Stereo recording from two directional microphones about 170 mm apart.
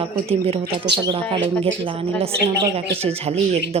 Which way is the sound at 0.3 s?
35° right (ahead or behind).